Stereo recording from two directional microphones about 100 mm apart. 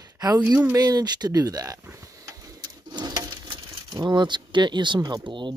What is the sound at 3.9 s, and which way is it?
Speech, 50° right (ahead or behind).